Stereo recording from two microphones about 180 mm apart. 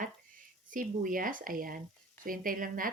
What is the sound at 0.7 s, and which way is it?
A woman's voice, 50° right (ahead or behind).